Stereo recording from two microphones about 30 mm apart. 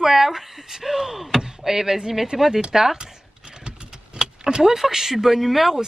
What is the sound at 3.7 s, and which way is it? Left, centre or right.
Vehicle, right.